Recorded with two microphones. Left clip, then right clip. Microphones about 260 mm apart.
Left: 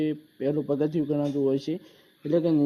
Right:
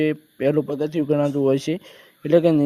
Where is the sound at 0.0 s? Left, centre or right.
Right.